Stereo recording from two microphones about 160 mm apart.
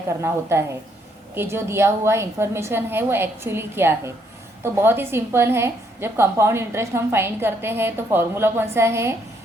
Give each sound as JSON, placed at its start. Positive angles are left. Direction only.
{"t": 0.2, "sound": "a woman's voice", "side_deg": -15}